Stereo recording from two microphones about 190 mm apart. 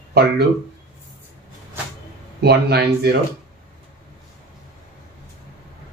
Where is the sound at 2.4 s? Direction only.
60° right (ahead or behind).